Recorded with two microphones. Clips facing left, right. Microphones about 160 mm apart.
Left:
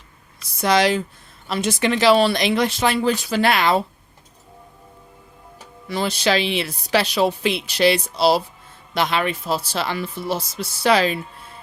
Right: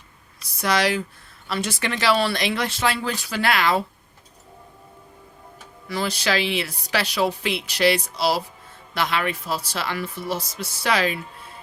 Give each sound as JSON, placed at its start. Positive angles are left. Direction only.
{"t": 0.6, "sound": "speech", "side_deg": 25}
{"t": 5.9, "sound": "speech", "side_deg": 25}